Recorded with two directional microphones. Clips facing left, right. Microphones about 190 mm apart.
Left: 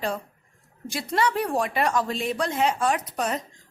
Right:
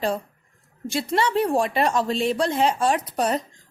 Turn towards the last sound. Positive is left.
turn(degrees=-35)  # may be behind; listen again after turning